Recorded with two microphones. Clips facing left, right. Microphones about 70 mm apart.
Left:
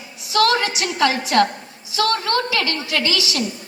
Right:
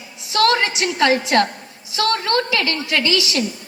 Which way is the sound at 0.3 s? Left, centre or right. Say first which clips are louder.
Right 1 dB; right.